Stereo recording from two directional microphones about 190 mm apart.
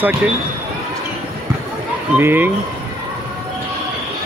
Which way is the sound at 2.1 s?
10° right (ahead or behind).